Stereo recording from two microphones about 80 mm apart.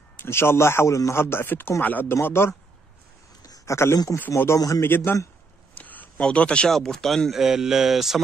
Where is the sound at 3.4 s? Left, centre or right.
Left.